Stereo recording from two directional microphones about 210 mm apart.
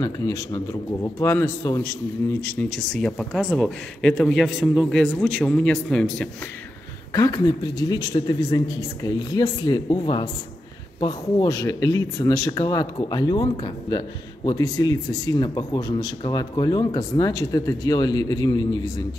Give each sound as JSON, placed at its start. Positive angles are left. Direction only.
{"t": 0.0, "sound": "a man's voice", "side_deg": 15}
{"t": 7.1, "sound": "speech", "side_deg": 15}